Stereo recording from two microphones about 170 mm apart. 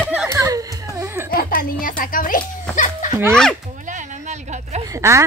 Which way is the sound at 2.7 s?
50° left (ahead or behind).